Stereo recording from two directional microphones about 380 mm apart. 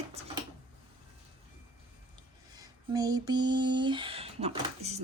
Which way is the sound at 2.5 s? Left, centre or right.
Centre.